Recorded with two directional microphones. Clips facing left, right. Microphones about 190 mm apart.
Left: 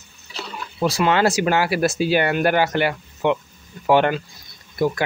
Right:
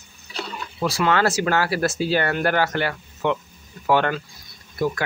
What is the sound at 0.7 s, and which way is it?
Speech, 20° left (ahead or behind).